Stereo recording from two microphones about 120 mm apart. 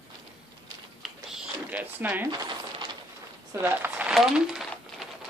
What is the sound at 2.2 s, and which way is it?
Coin, 35° right (ahead or behind).